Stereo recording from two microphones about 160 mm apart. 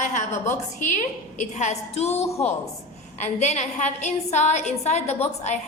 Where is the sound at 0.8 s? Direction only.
50° left (ahead or behind).